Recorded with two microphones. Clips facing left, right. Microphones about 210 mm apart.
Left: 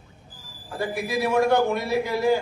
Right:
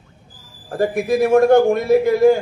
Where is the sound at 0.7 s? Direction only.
50° right (ahead or behind).